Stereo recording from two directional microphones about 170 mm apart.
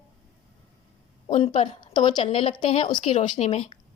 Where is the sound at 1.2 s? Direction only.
45° left (ahead or behind).